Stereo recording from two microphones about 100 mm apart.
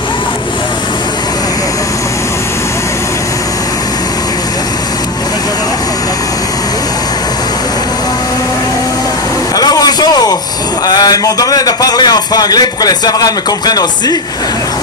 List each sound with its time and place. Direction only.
9.6 s vehicle: 40° left (ahead or behind)
10.9 s a man's voice: 40° left (ahead or behind)